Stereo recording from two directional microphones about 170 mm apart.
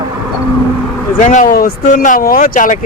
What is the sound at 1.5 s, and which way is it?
Speech, 60° left (ahead or behind).